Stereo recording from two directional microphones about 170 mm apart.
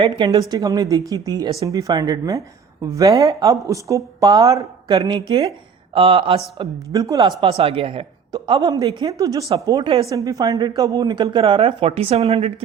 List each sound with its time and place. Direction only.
0.1 s a woman's voice: 20° right (ahead or behind)
4.9 s a woman's voice: 30° right (ahead or behind)
6.9 s a woman's voice: 20° right (ahead or behind)
7.2 s a woman's voice: 35° right (ahead or behind)